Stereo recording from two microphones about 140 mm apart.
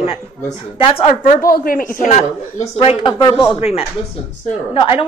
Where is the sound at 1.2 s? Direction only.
80° left.